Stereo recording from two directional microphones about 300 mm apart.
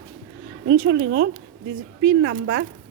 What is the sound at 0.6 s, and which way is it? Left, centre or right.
Speech, right.